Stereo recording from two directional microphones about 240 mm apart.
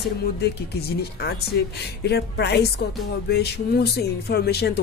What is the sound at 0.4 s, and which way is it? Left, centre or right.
Speech, left.